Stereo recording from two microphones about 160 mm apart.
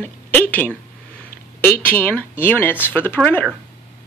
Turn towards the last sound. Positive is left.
turn(degrees=10)  # may be behind; listen again after turning